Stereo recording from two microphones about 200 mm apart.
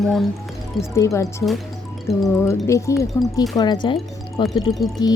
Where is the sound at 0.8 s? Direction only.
15° left (ahead or behind).